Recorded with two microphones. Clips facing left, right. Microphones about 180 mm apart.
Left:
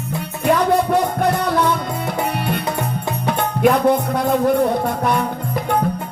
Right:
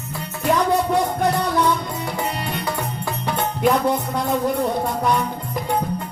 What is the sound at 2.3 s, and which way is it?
Music, 60° left (ahead or behind).